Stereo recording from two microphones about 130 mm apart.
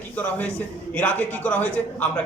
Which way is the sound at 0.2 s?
10° left (ahead or behind).